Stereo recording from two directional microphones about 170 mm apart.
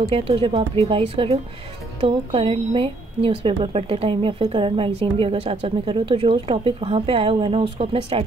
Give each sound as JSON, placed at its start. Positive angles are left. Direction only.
{"t": 0.0, "sound": "a woman's voice", "side_deg": -30}